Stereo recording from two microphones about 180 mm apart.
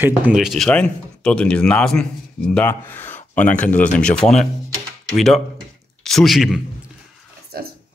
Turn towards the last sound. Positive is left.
turn(degrees=-55)  # may be behind; listen again after turning